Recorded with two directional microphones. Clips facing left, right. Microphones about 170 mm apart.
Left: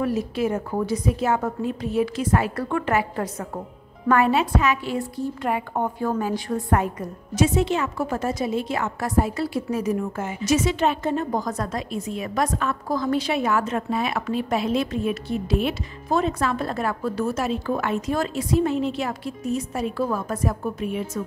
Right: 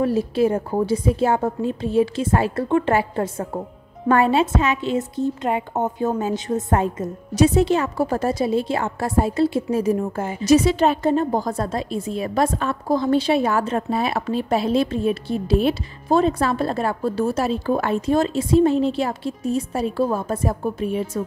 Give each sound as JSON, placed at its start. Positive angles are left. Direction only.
{"t": 0.0, "sound": "a woman's voice", "side_deg": -30}